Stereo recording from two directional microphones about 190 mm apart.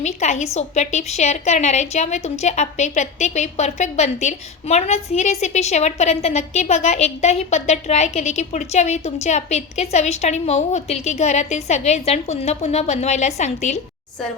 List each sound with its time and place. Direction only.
0.0 s a woman's voice: 35° left (ahead or behind)